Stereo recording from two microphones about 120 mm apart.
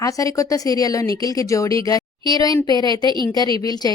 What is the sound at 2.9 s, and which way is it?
Speech, 40° right (ahead or behind).